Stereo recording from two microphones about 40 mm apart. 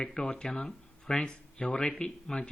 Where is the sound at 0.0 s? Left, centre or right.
Centre.